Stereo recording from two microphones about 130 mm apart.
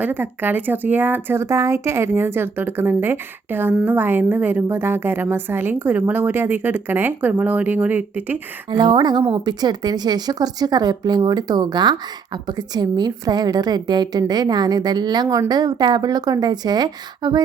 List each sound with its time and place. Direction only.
0.0 s a woman's voice: 15° right (ahead or behind)
8.7 s a woman's voice: 35° right (ahead or behind)